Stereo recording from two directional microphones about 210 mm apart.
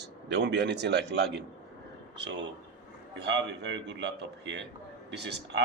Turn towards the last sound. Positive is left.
turn(degrees=-55)  # may be behind; listen again after turning